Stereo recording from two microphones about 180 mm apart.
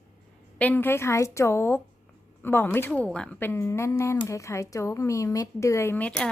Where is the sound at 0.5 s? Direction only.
10° left (ahead or behind).